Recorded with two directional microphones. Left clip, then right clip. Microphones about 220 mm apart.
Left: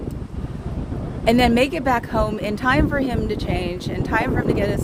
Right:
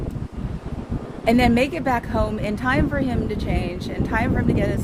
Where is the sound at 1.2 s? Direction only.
30° left (ahead or behind).